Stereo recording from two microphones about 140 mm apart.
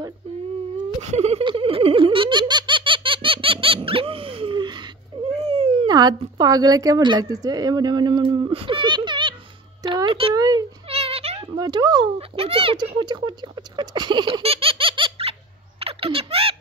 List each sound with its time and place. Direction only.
1.0 s a sound: 50° right (ahead or behind)
1.4 s giggle: 40° right (ahead or behind)
5.3 s cat: 45° right (ahead or behind)
5.9 s speech: 30° right (ahead or behind)
10.3 s speech: 30° right (ahead or behind)
10.9 s cat: 45° right (ahead or behind)
11.5 s a child's voice: 30° right (ahead or behind)
12.2 s speech: 40° right (ahead or behind)
15.8 s a sound: 40° right (ahead or behind)